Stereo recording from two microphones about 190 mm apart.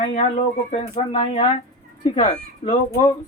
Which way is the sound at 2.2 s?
35° left (ahead or behind).